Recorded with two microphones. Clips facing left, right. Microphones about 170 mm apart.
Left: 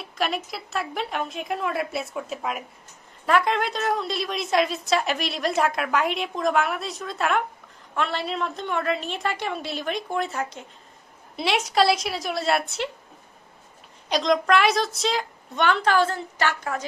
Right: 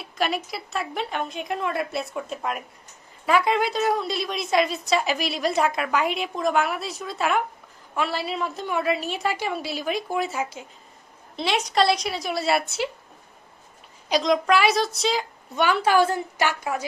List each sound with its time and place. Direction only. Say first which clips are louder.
0.0 s a woman's voice: right 1 dB; centre (ahead or behind)
14.0 s a woman's voice: right 1 dB; centre (ahead or behind)